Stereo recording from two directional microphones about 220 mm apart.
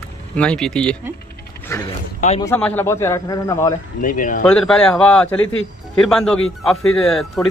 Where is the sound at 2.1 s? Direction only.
30° left (ahead or behind).